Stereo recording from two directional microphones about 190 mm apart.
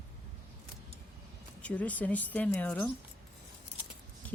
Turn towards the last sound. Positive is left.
turn(degrees=10)  # may be behind; listen again after turning